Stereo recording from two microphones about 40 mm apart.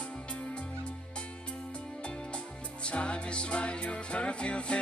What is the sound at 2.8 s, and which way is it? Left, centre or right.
Music, left.